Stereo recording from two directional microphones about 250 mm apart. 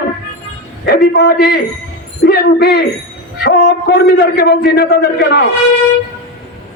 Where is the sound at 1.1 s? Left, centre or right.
Left.